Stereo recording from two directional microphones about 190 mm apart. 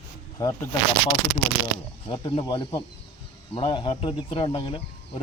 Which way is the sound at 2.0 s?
25° left (ahead or behind).